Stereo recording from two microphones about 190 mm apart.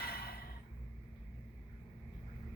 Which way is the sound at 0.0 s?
55° left (ahead or behind).